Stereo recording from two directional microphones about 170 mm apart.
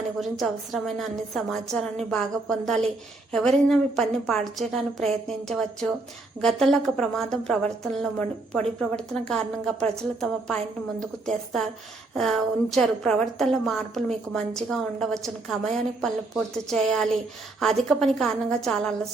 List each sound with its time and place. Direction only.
0.2 s a woman's voice: centre (ahead or behind)